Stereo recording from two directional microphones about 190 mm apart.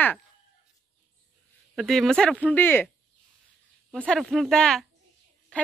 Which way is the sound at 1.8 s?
Centre (ahead or behind).